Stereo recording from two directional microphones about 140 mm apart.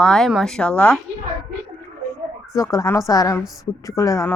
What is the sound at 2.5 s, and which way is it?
A woman's voice, 20° left (ahead or behind).